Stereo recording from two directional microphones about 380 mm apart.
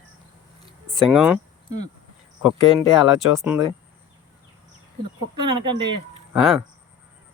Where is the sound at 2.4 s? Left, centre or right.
Left.